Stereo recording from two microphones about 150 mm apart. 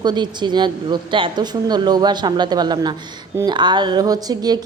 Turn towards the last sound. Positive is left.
turn(degrees=-25)  # may be behind; listen again after turning